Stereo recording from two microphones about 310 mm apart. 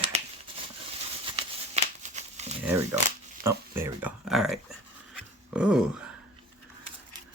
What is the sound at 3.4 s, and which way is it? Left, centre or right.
Speech, centre.